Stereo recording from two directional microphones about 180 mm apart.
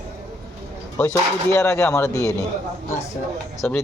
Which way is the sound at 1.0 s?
15° left (ahead or behind).